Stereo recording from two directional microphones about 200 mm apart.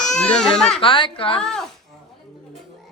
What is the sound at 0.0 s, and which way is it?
Baby cry, 35° left (ahead or behind).